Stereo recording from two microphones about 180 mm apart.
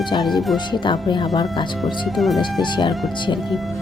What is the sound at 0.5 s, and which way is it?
Speech, 25° left (ahead or behind).